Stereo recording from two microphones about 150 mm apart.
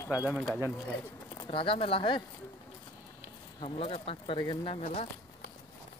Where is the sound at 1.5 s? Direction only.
35° left (ahead or behind).